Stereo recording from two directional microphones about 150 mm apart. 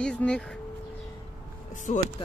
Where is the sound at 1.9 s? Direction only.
50° left (ahead or behind).